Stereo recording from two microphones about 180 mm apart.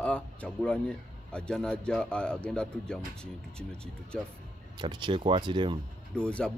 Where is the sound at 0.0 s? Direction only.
5° left (ahead or behind).